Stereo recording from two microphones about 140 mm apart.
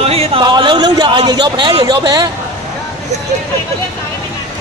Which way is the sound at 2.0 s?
30° right (ahead or behind).